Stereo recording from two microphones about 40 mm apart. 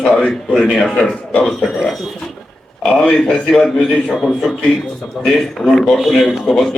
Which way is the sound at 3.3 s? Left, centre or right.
Left.